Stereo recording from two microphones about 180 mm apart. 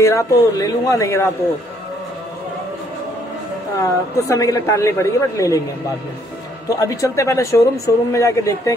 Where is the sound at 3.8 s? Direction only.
20° left (ahead or behind).